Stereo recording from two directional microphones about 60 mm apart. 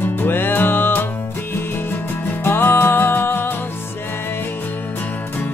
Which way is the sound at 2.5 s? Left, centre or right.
Left.